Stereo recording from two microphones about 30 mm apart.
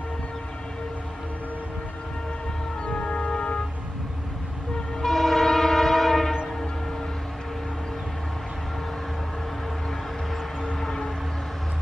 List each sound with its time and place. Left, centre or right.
2.8 s music: left
5.0 s train: centre
10.8 s music: centre